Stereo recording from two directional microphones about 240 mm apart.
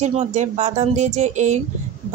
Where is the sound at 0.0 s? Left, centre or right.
Right.